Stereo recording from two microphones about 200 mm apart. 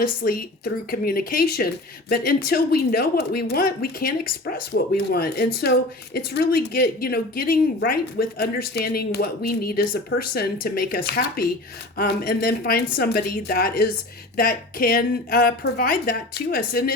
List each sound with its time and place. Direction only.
0.2 s speech: 45° left (ahead or behind)